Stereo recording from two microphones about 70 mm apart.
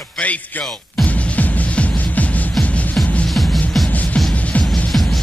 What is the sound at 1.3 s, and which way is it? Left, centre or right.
Music, left.